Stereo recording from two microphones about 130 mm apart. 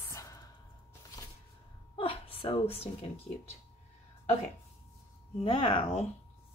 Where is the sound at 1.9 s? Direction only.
45° left (ahead or behind).